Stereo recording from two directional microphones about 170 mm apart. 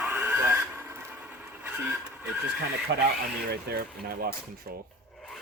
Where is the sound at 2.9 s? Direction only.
75° right (ahead or behind).